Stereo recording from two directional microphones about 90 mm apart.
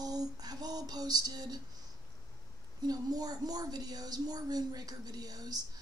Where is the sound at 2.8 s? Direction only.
45° right (ahead or behind).